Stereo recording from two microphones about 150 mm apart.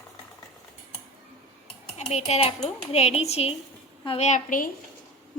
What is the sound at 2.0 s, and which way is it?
Speech, 45° left (ahead or behind).